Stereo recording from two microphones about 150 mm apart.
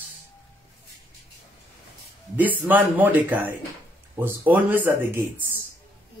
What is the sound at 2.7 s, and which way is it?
Speech, 10° right (ahead or behind).